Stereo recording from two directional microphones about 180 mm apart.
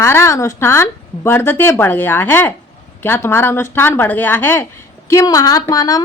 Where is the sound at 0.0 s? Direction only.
15° left (ahead or behind).